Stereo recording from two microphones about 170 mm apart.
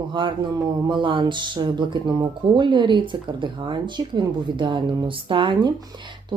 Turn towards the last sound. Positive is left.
turn(degrees=-25)  # may be behind; listen again after turning